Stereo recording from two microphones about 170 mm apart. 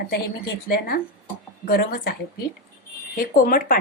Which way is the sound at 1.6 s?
65° left (ahead or behind).